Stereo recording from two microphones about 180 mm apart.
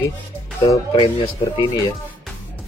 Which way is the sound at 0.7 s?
25° left (ahead or behind).